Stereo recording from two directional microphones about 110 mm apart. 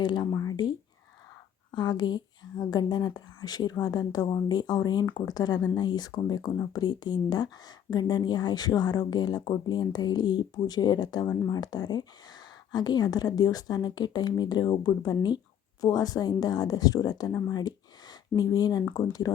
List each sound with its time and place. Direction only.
0.0 s speech: 40° left (ahead or behind)
0.3 s speech: 30° left (ahead or behind)
1.7 s speech: 40° left (ahead or behind)